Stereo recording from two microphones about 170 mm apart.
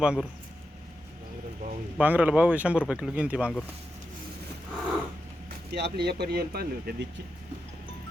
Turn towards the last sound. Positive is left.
turn(degrees=-70)  # may be behind; listen again after turning